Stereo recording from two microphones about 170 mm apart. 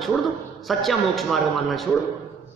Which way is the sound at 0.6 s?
Centre (ahead or behind).